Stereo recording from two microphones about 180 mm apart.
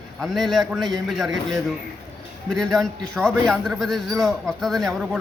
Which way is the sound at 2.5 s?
Centre (ahead or behind).